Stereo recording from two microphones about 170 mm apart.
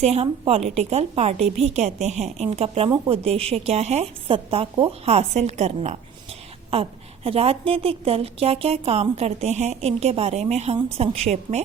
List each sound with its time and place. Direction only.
0.0 s a woman's voice: 40° right (ahead or behind)
7.3 s a woman's voice: 35° right (ahead or behind)